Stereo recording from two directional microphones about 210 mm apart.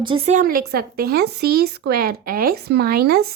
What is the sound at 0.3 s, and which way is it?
A woman's voice, 45° right (ahead or behind).